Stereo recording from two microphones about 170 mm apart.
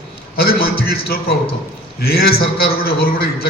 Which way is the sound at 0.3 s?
65° left (ahead or behind).